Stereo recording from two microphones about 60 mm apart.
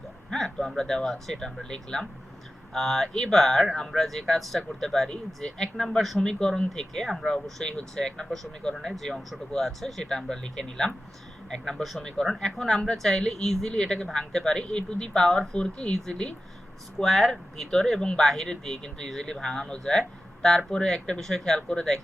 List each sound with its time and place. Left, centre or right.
0.3 s speech: centre
6.2 s speech: centre
12.1 s speech: centre